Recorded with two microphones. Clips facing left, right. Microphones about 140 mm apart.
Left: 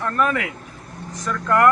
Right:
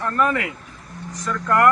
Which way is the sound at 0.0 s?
15° right (ahead or behind).